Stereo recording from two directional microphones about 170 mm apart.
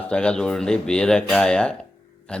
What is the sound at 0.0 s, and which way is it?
Speech, 5° left (ahead or behind).